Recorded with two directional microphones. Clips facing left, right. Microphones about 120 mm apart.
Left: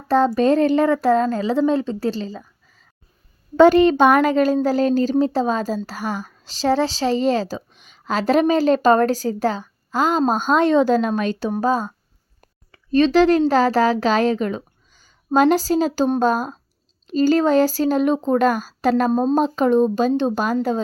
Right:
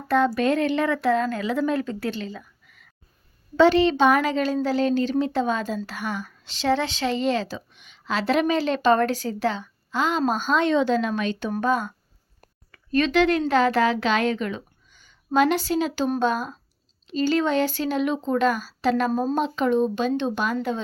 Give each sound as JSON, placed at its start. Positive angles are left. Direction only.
{"t": 0.3, "sound": "a woman's voice", "side_deg": 35}
{"t": 3.6, "sound": "a woman's voice", "side_deg": 45}